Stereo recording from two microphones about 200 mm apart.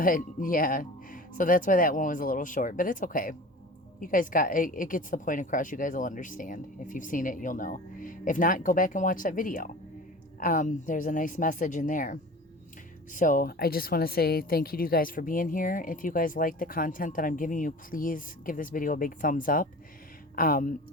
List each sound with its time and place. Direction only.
0.0 s speech: 45° left (ahead or behind)